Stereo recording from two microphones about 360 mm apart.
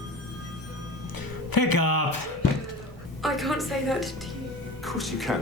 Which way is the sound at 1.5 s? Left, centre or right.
Left.